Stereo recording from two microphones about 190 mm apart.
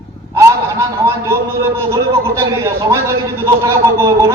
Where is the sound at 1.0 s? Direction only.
15° right (ahead or behind).